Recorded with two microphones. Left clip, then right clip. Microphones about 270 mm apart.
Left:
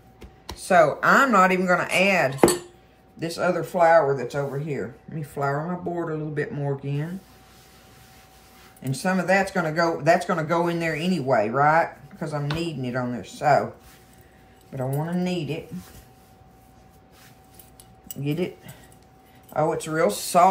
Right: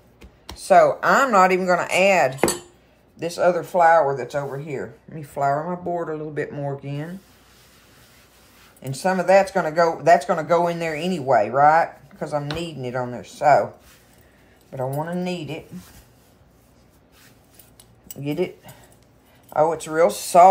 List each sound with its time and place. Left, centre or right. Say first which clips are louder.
0.7 s speech: right 3 dB; centre
8.8 s speech: right 4 dB; centre
14.8 s speech: right 3 dB; centre
18.0 s speech: right 3 dB; right
19.5 s speech: right 4 dB; centre